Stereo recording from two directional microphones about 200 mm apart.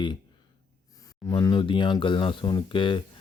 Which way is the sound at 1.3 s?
20° left (ahead or behind).